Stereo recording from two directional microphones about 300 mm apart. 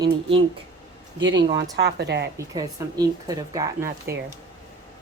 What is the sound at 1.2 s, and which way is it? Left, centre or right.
A woman's voice, right.